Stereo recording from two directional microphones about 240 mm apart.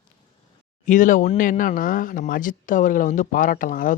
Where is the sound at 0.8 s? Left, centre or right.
Left.